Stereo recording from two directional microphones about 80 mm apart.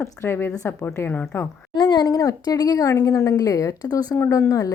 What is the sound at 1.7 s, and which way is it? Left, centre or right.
A woman's voice, left.